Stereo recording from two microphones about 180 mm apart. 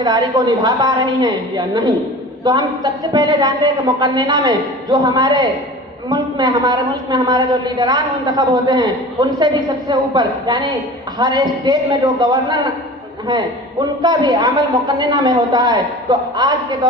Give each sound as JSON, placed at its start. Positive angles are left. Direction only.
{"t": 0.0, "sound": "a man's voice", "side_deg": -25}
{"t": 14.0, "sound": "a man's voice", "side_deg": -25}